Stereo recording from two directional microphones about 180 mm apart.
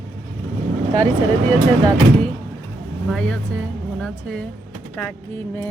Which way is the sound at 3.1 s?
5° left (ahead or behind).